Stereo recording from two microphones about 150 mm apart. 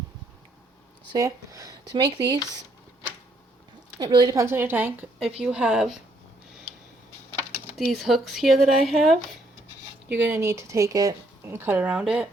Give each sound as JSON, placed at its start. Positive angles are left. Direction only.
{"t": 1.1, "sound": "speech", "side_deg": -25}
{"t": 3.9, "sound": "speech", "side_deg": -25}
{"t": 7.9, "sound": "speech", "side_deg": 0}
{"t": 10.2, "sound": "speech", "side_deg": -15}